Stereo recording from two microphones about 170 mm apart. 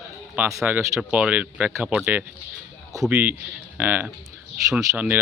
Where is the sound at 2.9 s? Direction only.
20° right (ahead or behind).